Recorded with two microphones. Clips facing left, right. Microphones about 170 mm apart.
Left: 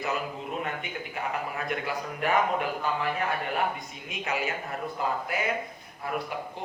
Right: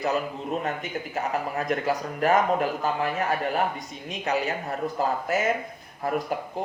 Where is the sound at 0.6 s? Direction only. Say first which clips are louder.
Right 4 dB; 40° right (ahead or behind).